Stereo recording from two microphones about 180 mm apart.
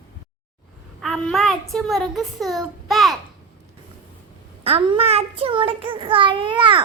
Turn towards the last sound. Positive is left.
turn(degrees=-25)  # may be behind; listen again after turning